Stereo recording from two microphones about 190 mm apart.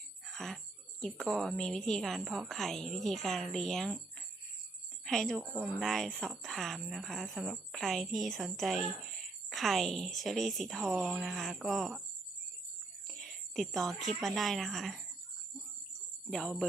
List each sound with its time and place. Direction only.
0.3 s a woman's voice: centre (ahead or behind)
5.0 s a woman's voice: centre (ahead or behind)
13.1 s a woman's voice: centre (ahead or behind)
16.3 s a woman's voice: centre (ahead or behind)